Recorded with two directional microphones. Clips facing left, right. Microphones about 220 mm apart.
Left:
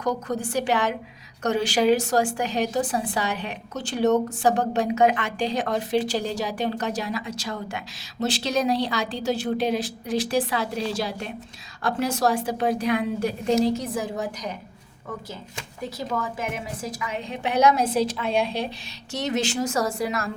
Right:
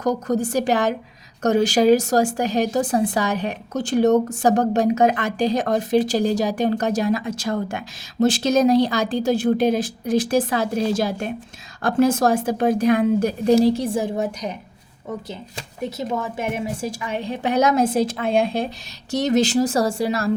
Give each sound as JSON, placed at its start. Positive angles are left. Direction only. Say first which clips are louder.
{"t": 0.0, "sound": "a woman's voice", "louder": "right 6 dB", "side_deg": -40}
{"t": 15.5, "sound": "a woman's voice", "louder": "right 5 dB", "side_deg": -25}